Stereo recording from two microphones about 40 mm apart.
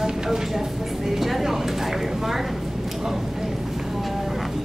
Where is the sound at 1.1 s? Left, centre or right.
Centre.